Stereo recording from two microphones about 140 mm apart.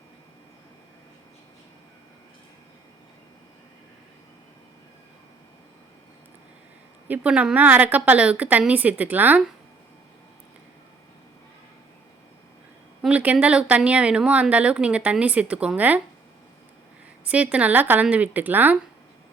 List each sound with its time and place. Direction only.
7.1 s speech: 10° right (ahead or behind)
13.0 s speech: 10° right (ahead or behind)
17.2 s speech: 10° right (ahead or behind)